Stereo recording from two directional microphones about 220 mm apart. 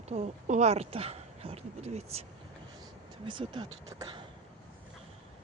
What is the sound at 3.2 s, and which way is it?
Speech, 20° right (ahead or behind).